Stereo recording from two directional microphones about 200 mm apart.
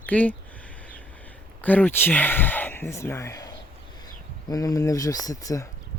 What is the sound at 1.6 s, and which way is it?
Speech, 10° left (ahead or behind).